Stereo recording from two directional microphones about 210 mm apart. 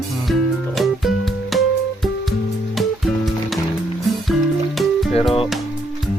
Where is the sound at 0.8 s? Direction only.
Centre (ahead or behind).